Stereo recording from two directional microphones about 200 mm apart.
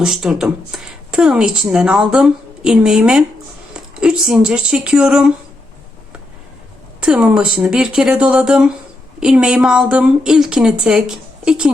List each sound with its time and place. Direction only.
0.0 s speech: centre (ahead or behind)
7.0 s speech: 5° right (ahead or behind)